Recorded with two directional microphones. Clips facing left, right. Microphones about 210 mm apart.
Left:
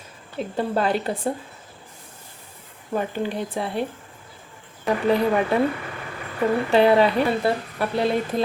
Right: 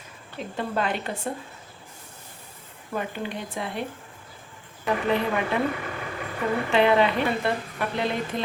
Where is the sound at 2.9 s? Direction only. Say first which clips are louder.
Left 5 dB; 35° left (ahead or behind).